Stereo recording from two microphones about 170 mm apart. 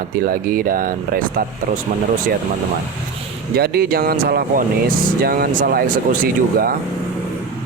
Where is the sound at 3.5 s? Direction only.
65° right (ahead or behind).